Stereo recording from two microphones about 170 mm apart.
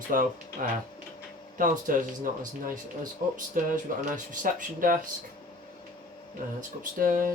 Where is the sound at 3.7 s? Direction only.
50° right (ahead or behind).